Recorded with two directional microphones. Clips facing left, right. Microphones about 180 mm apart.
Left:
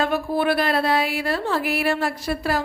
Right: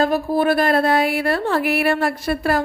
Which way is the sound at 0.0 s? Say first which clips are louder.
Right 4 dB; 40° right (ahead or behind).